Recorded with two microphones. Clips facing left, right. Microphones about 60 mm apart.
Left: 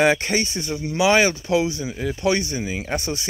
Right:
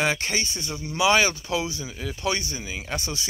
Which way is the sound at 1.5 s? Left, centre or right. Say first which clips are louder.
Left 7 dB; left.